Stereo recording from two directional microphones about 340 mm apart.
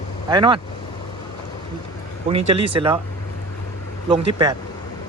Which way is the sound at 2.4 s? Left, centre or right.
Right.